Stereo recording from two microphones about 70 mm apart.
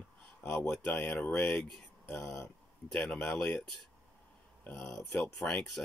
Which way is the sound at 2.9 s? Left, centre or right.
Centre.